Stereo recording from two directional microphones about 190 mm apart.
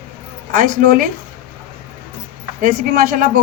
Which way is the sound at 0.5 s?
45° right (ahead or behind).